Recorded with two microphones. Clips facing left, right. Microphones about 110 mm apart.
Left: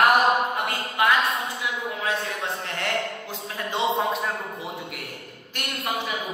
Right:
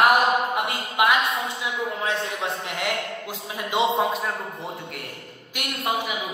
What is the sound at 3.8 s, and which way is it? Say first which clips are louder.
Speech: right 2 dB; centre (ahead or behind).